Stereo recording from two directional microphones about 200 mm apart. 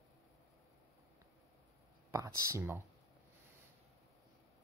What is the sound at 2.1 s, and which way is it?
Speech, 15° right (ahead or behind).